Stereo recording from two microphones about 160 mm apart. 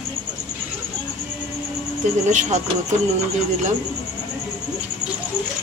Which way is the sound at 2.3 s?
50° right (ahead or behind).